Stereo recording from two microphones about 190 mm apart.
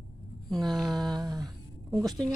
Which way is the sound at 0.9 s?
20° right (ahead or behind).